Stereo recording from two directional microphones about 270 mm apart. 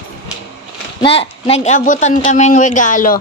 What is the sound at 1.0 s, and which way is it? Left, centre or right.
A woman's voice, left.